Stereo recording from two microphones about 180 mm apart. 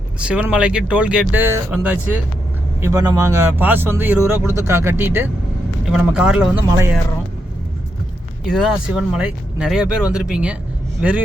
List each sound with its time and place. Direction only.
0.2 s speech: 5° right (ahead or behind)
2.8 s speech: 20° right (ahead or behind)
6.7 s speech: 15° right (ahead or behind)
8.4 s speech: centre (ahead or behind)